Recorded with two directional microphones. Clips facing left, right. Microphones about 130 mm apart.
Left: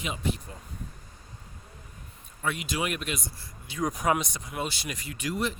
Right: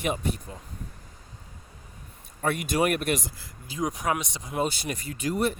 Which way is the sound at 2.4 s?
55° right (ahead or behind).